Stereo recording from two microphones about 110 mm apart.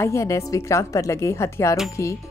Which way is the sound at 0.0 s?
25° left (ahead or behind).